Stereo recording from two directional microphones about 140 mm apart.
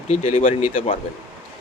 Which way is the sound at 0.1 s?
50° left (ahead or behind).